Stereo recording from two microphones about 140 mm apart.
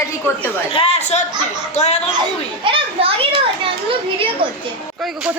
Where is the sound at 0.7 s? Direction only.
45° left (ahead or behind).